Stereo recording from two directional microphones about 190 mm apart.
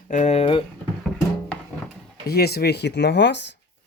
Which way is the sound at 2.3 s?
55° left (ahead or behind).